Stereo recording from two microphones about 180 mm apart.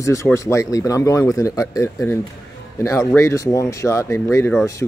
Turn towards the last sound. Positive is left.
turn(degrees=15)  # may be behind; listen again after turning